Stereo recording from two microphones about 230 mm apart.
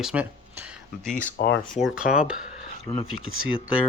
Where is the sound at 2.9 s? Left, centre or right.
Centre.